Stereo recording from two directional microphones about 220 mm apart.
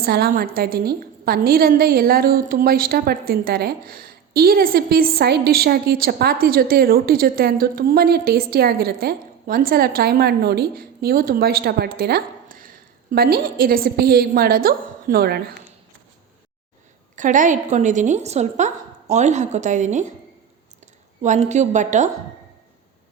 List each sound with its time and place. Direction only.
0.0 s a woman's voice: 45° right (ahead or behind)
17.2 s a woman's voice: 35° right (ahead or behind)
21.2 s a woman's voice: 30° right (ahead or behind)